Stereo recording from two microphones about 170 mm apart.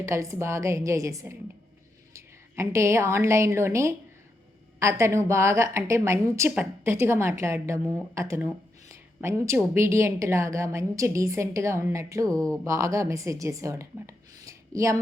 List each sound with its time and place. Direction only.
0.0 s a woman's voice: 15° right (ahead or behind)